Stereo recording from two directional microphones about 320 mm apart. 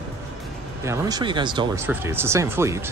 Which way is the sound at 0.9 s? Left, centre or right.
Centre.